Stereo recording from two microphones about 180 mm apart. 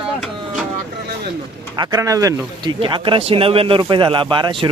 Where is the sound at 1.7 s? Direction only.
20° right (ahead or behind).